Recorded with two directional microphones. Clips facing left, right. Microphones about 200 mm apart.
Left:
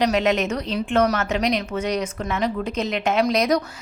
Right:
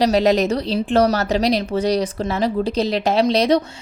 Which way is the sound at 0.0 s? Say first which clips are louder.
Right 4 dB; 35° right (ahead or behind).